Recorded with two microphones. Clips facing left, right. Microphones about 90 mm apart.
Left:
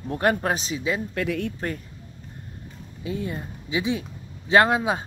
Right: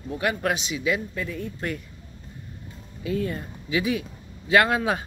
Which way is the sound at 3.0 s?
20° left (ahead or behind).